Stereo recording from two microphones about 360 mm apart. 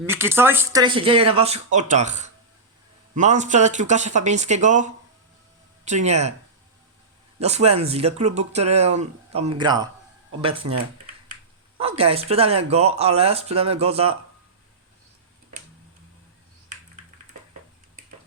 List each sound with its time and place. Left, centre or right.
0.0 s speech: centre
7.4 s speech: centre
11.8 s speech: centre